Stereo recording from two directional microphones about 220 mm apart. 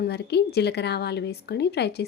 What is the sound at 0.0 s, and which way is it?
A woman's voice, 50° left (ahead or behind).